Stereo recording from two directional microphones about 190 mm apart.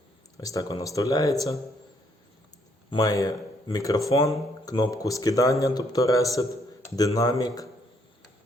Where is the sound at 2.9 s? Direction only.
20° left (ahead or behind).